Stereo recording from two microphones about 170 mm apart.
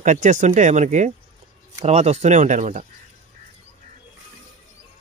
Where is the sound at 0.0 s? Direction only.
50° right (ahead or behind).